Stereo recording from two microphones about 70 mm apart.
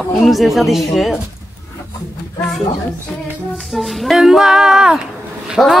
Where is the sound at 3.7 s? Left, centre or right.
Centre.